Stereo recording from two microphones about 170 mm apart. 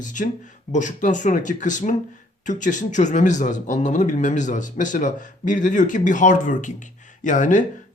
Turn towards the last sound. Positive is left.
turn(degrees=50)  # may be behind; listen again after turning